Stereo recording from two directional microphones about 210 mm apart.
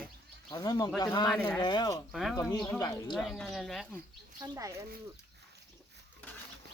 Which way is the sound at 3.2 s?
Centre (ahead or behind).